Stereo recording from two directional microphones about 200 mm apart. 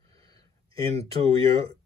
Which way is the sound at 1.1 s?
30° right (ahead or behind).